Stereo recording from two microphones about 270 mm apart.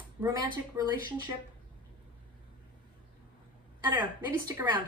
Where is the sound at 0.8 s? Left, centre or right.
Centre.